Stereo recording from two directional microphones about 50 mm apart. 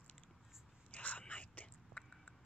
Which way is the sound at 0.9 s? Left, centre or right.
Left.